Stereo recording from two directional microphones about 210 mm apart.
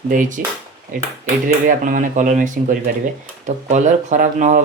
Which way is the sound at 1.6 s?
40° right (ahead or behind).